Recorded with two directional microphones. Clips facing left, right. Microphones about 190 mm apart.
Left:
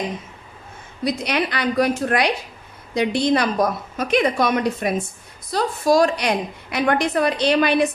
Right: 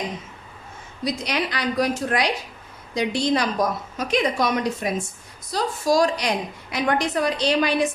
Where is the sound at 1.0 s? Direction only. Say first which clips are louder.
Left 3 dB; 60° left (ahead or behind).